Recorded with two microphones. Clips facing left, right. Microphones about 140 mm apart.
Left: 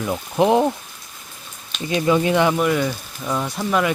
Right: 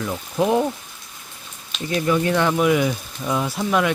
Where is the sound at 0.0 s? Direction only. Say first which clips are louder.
Left 3 dB; 20° left (ahead or behind).